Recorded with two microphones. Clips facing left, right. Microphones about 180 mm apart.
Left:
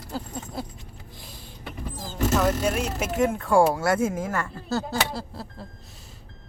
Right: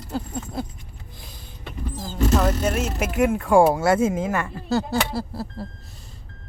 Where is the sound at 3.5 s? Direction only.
20° right (ahead or behind).